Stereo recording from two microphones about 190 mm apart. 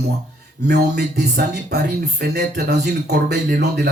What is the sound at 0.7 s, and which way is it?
A man's voice, 60° right (ahead or behind).